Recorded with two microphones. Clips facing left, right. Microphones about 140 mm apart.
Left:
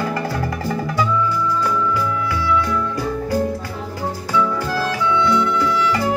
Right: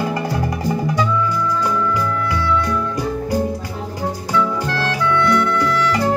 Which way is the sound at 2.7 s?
20° right (ahead or behind).